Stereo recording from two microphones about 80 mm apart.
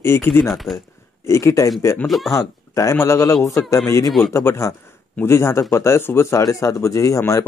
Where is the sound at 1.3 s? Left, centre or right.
Left.